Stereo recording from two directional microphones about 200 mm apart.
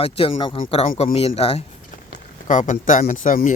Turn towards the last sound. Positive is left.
turn(degrees=40)  # may be behind; listen again after turning